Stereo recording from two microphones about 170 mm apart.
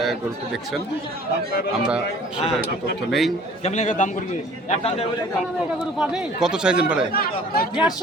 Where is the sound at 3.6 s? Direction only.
45° left (ahead or behind).